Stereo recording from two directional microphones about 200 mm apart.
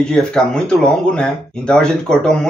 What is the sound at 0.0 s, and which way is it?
Speech, centre (ahead or behind).